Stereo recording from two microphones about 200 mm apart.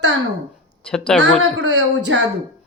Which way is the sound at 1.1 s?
Centre (ahead or behind).